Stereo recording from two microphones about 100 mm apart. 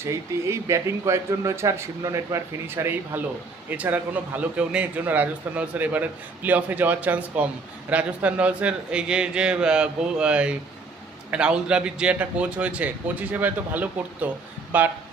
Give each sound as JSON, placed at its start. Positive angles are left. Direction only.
{"t": 0.0, "sound": "a man's voice", "side_deg": -30}